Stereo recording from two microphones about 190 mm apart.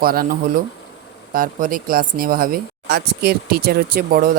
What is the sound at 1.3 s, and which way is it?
Speech, 45° right (ahead or behind).